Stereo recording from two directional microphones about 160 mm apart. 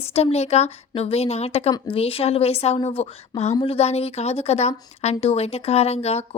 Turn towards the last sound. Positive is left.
turn(degrees=40)  # may be behind; listen again after turning